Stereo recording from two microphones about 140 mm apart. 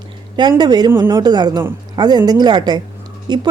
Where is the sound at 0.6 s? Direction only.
30° right (ahead or behind).